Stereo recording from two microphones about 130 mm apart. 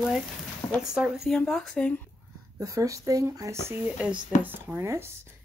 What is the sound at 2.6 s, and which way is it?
Speech, 25° right (ahead or behind).